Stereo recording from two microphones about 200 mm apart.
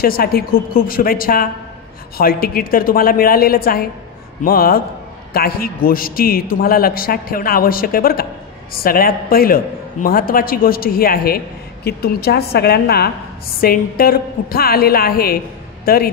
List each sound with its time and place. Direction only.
0.0 s a man's voice: 50° left (ahead or behind)